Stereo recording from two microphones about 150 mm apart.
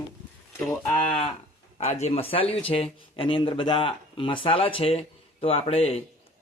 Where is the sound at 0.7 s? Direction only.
20° left (ahead or behind).